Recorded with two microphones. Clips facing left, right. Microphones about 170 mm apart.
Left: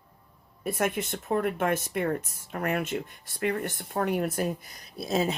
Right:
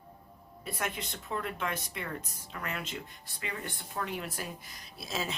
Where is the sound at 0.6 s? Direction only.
50° left (ahead or behind).